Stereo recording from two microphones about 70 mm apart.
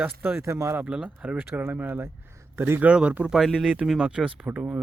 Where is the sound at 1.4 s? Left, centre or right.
Right.